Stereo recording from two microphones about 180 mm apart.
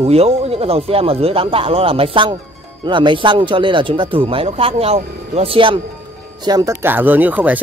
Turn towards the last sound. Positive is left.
turn(degrees=-10)  # may be behind; listen again after turning